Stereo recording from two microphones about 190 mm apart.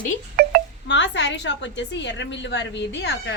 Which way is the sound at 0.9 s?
70° left (ahead or behind).